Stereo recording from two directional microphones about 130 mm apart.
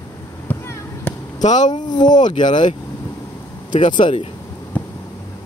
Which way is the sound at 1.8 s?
35° left (ahead or behind).